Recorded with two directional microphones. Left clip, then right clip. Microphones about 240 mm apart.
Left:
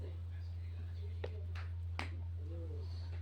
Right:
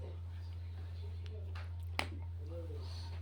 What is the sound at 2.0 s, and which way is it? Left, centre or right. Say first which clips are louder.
Finger snapping: right 6 dB; right.